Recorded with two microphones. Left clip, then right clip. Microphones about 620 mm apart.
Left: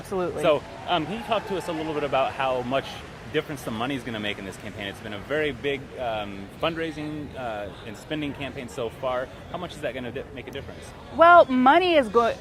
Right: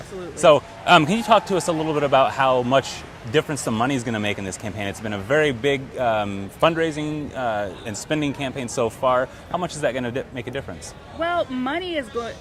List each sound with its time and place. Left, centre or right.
0.4 s speech: right
0.9 s speech: right
11.2 s speech: left